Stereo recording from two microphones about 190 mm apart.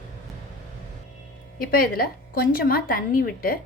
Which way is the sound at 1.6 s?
50° left (ahead or behind).